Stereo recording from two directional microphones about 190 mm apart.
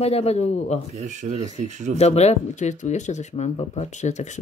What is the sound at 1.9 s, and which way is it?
Speech, 35° left (ahead or behind).